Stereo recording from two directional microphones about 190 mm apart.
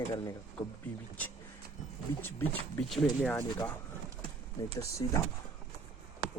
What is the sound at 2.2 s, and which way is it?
Speech, 10° left (ahead or behind).